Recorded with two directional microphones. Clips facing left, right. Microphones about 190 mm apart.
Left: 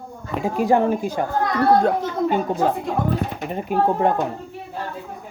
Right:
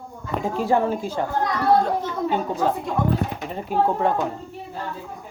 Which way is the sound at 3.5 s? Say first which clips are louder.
Left 2 dB; 15° left (ahead or behind).